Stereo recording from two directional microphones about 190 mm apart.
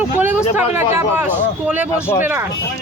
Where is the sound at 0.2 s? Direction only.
10° right (ahead or behind).